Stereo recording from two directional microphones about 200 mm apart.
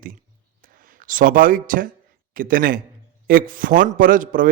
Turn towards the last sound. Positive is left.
turn(degrees=-45)  # may be behind; listen again after turning